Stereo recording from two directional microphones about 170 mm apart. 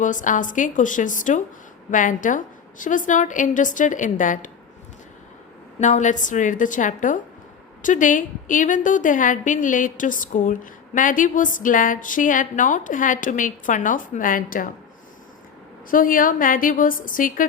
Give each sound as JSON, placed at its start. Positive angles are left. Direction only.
{"t": 0.0, "sound": "a woman's voice", "side_deg": 50}
{"t": 5.8, "sound": "a woman's voice", "side_deg": 45}
{"t": 15.9, "sound": "a woman's voice", "side_deg": 55}